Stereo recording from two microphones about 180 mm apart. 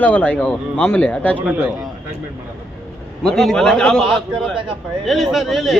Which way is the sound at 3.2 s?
Centre (ahead or behind).